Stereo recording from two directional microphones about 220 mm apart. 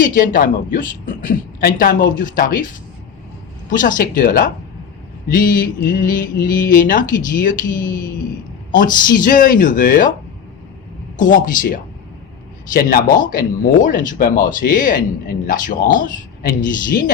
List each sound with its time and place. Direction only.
0.0 s a man's voice: 40° left (ahead or behind)
3.7 s a man's voice: 40° left (ahead or behind)
9.2 s a man's voice: 40° left (ahead or behind)
11.2 s a man's voice: 35° left (ahead or behind)